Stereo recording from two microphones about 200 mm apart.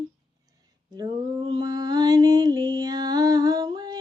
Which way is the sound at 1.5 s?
20° right (ahead or behind).